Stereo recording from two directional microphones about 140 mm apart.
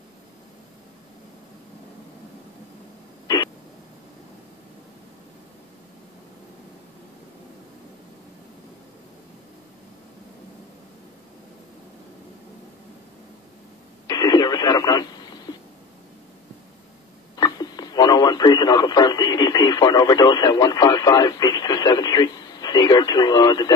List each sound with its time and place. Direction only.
3.3 s a sound: 25° left (ahead or behind)
14.0 s radio: 30° left (ahead or behind)
17.4 s speech: 30° left (ahead or behind)